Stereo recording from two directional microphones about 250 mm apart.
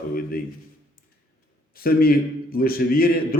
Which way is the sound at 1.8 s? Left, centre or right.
Left.